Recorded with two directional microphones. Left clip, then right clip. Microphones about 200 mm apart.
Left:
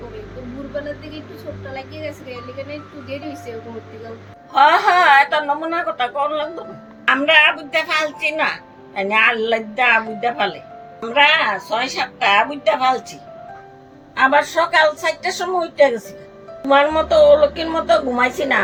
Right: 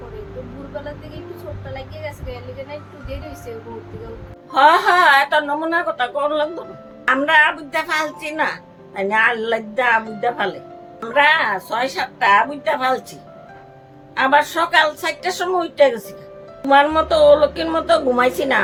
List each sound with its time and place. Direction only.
4.5 s a woman's voice: 20° right (ahead or behind)
14.2 s a woman's voice: 15° right (ahead or behind)